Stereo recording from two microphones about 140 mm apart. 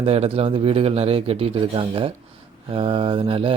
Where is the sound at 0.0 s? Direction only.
45° right (ahead or behind).